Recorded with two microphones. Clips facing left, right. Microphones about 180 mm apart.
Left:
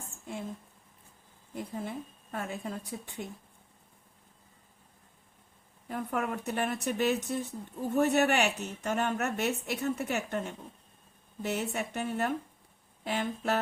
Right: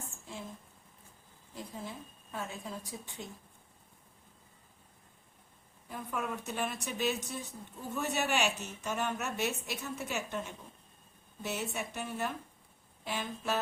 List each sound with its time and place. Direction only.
1.5 s a woman's voice: 60° left (ahead or behind)
5.9 s a woman's voice: 60° left (ahead or behind)